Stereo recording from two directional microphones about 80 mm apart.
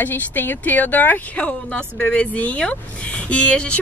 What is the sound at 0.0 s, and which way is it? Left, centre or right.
Speech, left.